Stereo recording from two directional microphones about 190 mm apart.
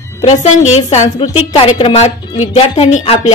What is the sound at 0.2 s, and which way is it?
A woman's voice, 35° left (ahead or behind).